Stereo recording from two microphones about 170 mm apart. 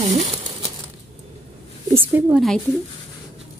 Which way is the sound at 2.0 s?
10° right (ahead or behind).